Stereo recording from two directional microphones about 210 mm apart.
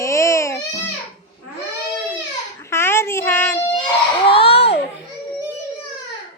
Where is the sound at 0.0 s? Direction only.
15° left (ahead or behind).